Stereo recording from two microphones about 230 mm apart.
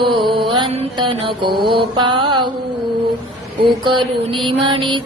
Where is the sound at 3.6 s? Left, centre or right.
Right.